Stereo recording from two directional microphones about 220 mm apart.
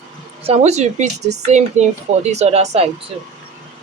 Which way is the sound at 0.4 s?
30° right (ahead or behind).